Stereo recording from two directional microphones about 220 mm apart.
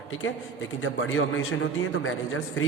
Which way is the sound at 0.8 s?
65° left (ahead or behind).